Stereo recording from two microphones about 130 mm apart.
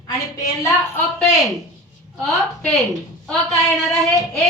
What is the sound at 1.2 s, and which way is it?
A woman's voice, centre (ahead or behind).